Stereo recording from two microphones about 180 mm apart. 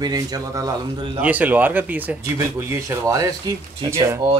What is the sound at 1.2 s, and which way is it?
Speech, 10° right (ahead or behind).